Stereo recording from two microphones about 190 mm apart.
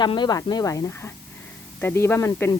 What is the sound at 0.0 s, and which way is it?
Speech, 25° left (ahead or behind).